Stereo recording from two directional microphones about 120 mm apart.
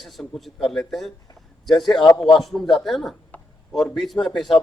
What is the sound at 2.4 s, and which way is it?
Speech, centre (ahead or behind).